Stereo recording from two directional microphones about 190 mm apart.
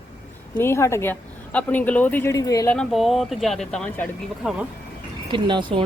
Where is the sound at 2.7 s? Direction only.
Centre (ahead or behind).